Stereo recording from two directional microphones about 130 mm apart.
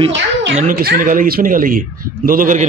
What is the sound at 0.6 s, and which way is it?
Speech, 90° right.